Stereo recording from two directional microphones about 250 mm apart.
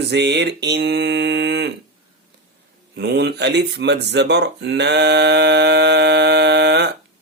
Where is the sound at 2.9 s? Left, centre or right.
Right.